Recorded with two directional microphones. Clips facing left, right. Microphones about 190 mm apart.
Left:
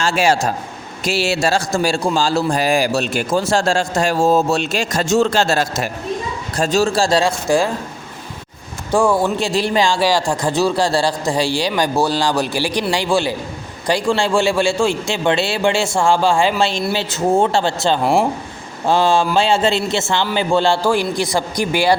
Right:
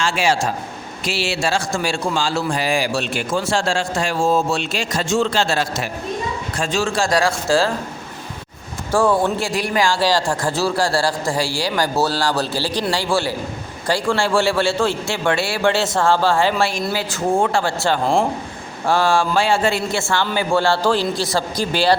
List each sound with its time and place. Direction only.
0.0 s a man's voice: 40° left (ahead or behind); by 7.7 s 15° left (ahead or behind)
8.9 s a man's voice: 15° left (ahead or behind)
9.4 s a man's voice: 25° left (ahead or behind)